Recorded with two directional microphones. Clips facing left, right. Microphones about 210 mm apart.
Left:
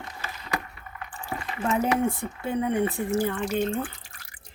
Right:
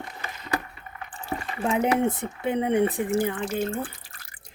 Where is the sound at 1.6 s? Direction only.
15° right (ahead or behind).